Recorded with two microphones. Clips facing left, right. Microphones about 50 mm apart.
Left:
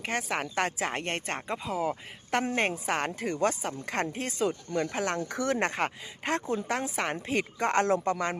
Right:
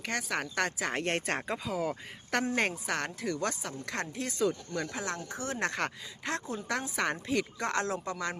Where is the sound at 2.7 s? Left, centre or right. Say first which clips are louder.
Left 4 dB; left.